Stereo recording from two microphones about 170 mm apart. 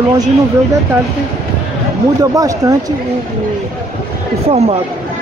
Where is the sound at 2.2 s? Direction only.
20° right (ahead or behind).